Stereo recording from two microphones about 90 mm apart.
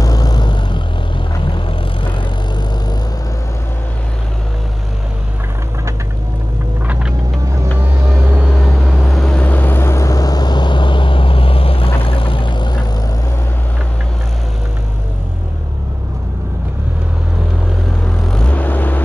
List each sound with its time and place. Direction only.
0.0 s vehicle: 45° left (ahead or behind)
1.5 s vehicle: 75° left (ahead or behind)
6.9 s vehicle: 10° right (ahead or behind)
8.8 s vehicle: centre (ahead or behind)
9.4 s vehicle: 20° left (ahead or behind); by 12.8 s 55° left (ahead or behind)
18.3 s vehicle: 15° left (ahead or behind)